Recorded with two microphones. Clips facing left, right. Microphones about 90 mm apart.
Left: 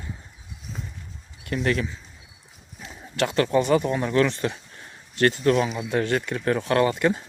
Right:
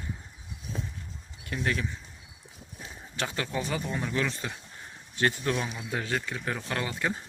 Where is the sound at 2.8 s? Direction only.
90° left; by 4.5 s 70° left (ahead or behind).